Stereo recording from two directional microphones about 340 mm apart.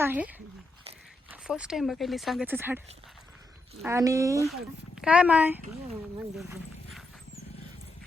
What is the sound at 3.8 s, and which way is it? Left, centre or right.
Speech, centre.